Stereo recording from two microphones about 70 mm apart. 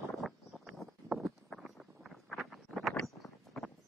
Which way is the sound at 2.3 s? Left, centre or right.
Centre.